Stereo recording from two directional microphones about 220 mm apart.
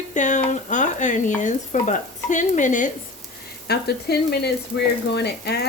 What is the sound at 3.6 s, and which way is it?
Speech, 45° left (ahead or behind).